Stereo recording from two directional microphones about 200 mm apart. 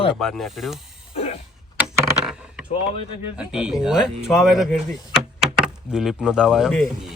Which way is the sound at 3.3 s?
5° right (ahead or behind).